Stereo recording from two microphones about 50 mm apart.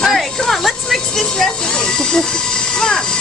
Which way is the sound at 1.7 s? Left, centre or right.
Centre.